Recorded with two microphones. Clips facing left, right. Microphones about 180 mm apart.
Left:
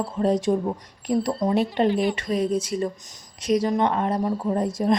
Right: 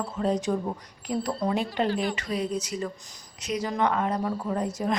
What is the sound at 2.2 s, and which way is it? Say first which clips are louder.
Speech: left 6 dB; 35° left (ahead or behind).